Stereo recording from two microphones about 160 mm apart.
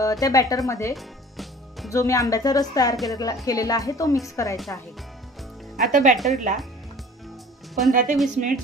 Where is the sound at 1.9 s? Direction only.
20° left (ahead or behind).